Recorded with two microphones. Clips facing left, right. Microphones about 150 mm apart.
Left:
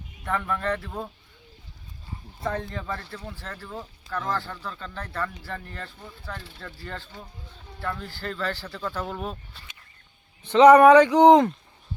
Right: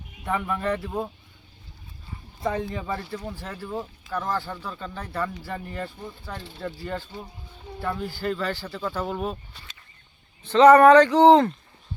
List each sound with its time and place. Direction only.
0.3 s speech: 10° right (ahead or behind)
2.4 s speech: 10° right (ahead or behind)
10.4 s speech: 15° left (ahead or behind)